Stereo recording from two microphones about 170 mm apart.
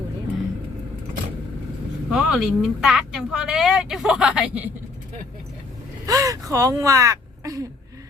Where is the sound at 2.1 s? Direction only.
5° right (ahead or behind).